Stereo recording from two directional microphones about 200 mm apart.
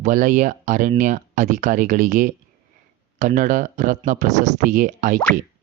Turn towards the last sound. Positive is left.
turn(degrees=-40)  # may be behind; listen again after turning